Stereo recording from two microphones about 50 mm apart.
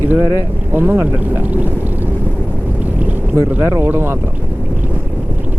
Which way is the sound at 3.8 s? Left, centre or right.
Right.